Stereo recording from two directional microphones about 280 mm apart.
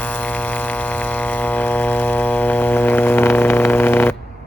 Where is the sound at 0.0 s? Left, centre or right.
Centre.